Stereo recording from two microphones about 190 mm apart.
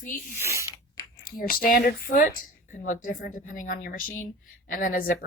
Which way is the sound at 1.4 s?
50° left (ahead or behind).